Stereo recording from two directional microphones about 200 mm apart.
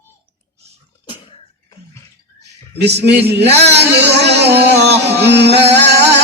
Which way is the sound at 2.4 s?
55° right (ahead or behind).